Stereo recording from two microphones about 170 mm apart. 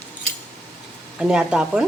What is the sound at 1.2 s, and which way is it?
Speech, 5° right (ahead or behind).